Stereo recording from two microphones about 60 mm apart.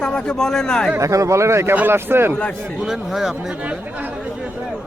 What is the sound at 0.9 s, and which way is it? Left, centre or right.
Speech, right.